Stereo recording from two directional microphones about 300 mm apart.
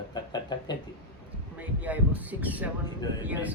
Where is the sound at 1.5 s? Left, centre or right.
Centre.